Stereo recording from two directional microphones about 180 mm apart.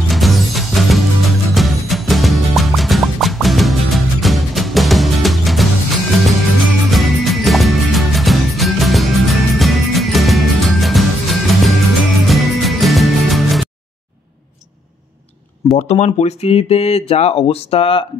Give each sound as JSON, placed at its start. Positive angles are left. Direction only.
{"t": 0.1, "sound": "music", "side_deg": 0}
{"t": 15.9, "sound": "speech", "side_deg": 35}